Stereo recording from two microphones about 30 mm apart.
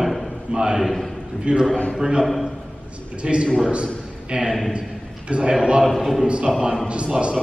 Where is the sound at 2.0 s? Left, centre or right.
Right.